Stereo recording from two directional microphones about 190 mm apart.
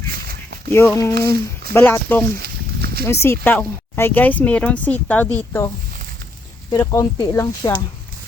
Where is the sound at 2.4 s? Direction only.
55° right (ahead or behind).